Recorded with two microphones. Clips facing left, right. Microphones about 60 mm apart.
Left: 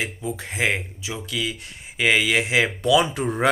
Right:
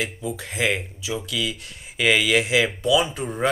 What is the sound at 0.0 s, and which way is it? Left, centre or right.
Speech, left.